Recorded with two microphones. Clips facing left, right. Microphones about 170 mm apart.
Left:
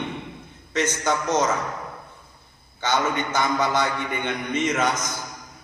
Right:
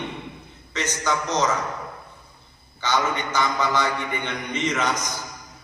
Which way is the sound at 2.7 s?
50° left (ahead or behind).